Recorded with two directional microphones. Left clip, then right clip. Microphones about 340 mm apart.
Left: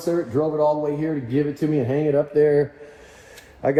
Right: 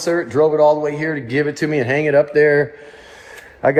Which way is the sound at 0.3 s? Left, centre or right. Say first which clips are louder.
Right 8 dB; right.